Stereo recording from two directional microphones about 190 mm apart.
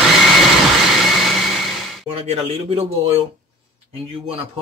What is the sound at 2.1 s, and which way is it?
Speech, 30° right (ahead or behind).